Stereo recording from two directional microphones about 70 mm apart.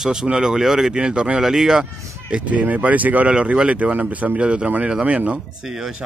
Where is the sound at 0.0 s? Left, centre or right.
Centre.